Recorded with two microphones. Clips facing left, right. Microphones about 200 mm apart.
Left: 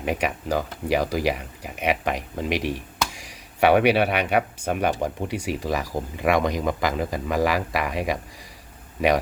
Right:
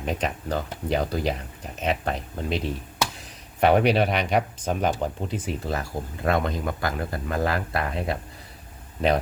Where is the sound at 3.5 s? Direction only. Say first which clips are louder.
Left 2 dB; 70° left (ahead or behind).